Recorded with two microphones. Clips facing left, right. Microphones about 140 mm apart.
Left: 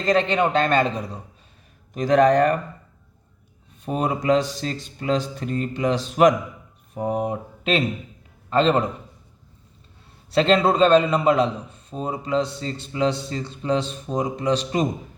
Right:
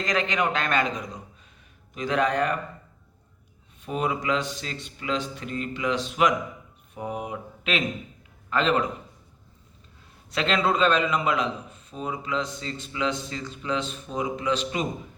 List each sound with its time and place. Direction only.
0.0 s a man's voice: 30° left (ahead or behind)
3.8 s a man's voice: 40° left (ahead or behind)
10.3 s a man's voice: 35° left (ahead or behind)